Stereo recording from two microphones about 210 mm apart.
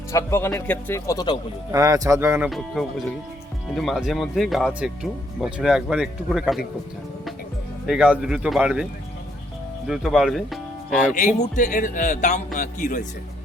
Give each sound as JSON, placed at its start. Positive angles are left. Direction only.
{"t": 0.1, "sound": "speech", "side_deg": 15}
{"t": 1.7, "sound": "speech", "side_deg": -15}
{"t": 2.5, "sound": "speech", "side_deg": 0}
{"t": 7.9, "sound": "speech", "side_deg": -5}
{"t": 11.3, "sound": "speech", "side_deg": 35}